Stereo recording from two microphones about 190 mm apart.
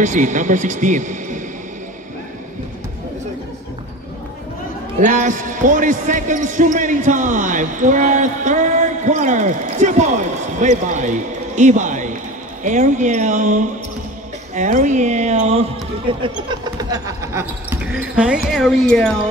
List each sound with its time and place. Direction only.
0.0 s speech: 40° right (ahead or behind)
5.0 s speech: 40° right (ahead or behind)
16.2 s speech: 25° right (ahead or behind); by 19.1 s 5° left (ahead or behind)